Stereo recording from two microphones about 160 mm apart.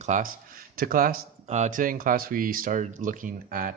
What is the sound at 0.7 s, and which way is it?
Speech, 65° right (ahead or behind).